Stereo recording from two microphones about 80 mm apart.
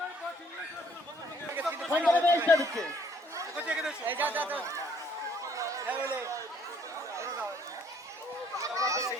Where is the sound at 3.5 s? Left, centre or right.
Centre.